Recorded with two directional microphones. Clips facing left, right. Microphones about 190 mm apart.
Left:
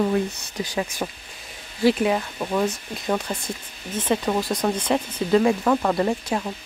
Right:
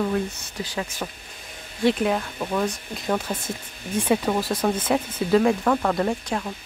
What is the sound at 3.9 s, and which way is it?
Speech, 10° right (ahead or behind).